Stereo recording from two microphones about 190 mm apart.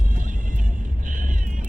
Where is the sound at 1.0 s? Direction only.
45° right (ahead or behind).